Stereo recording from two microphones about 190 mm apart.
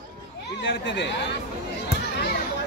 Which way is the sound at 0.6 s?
65° left (ahead or behind).